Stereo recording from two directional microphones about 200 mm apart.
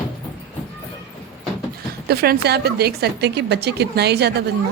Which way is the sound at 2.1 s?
50° right (ahead or behind).